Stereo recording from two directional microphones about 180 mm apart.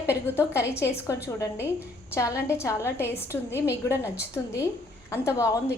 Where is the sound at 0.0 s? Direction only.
15° left (ahead or behind).